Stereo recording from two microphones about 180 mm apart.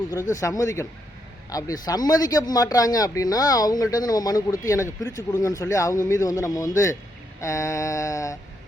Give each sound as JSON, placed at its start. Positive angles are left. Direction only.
{"t": 0.3, "sound": "speech", "side_deg": 20}